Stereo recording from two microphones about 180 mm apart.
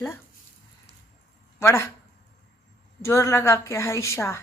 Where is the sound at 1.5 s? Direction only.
15° left (ahead or behind).